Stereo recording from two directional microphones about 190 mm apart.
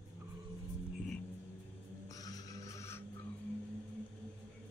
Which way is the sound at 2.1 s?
20° left (ahead or behind).